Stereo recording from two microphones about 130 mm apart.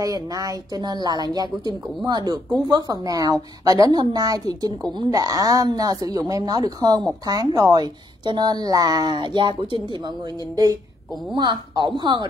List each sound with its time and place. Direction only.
0.0 s a woman's voice: 30° right (ahead or behind)